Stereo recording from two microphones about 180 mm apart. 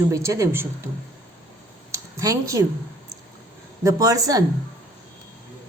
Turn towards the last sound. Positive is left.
turn(degrees=-20)  # may be behind; listen again after turning